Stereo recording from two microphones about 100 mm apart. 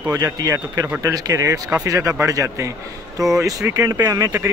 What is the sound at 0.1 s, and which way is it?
Speech, 35° right (ahead or behind).